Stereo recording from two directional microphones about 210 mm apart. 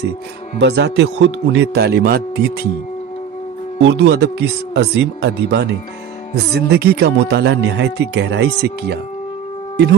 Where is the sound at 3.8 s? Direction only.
55° right (ahead or behind).